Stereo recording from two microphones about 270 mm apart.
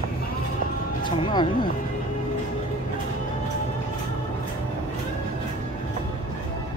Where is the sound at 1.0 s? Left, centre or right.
Centre.